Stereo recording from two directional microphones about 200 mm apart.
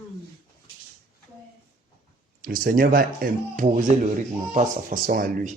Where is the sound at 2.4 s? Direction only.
45° right (ahead or behind).